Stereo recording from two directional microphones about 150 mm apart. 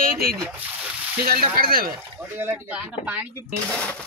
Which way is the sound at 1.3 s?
75° right (ahead or behind).